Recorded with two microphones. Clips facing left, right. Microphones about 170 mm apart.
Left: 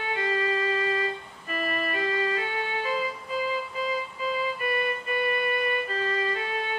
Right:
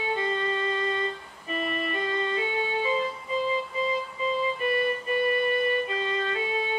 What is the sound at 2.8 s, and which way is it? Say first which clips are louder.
Music: right 2 dB; 5° left (ahead or behind).